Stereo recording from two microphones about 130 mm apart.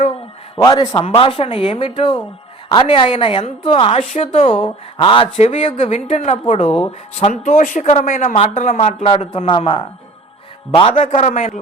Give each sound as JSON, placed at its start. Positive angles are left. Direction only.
{"t": 0.5, "sound": "a man's voice", "side_deg": 35}
{"t": 1.0, "sound": "speech", "side_deg": 45}
{"t": 7.3, "sound": "speech", "side_deg": 80}
{"t": 9.0, "sound": "speech", "side_deg": 45}
{"t": 10.9, "sound": "speech", "side_deg": 65}